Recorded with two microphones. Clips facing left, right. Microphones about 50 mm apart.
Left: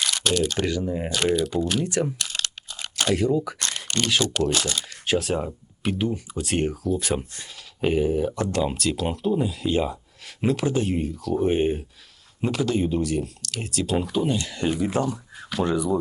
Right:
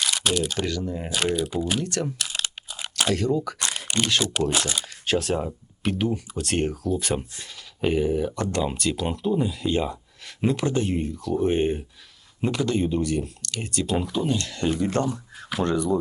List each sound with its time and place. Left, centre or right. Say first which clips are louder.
0.0 s computer keyboard: left 1 dB; centre
0.6 s speech: left 3 dB; centre
1.1 s speech: left 2 dB; centre
1.8 s speech: left 3 dB; centre
2.1 s computer keyboard: even; centre
3.2 s speech: left 2 dB; centre
3.6 s camera: right 1 dB; centre
3.8 s speech: left 1 dB; centre